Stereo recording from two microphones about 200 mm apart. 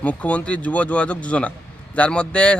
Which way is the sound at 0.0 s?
5° left (ahead or behind).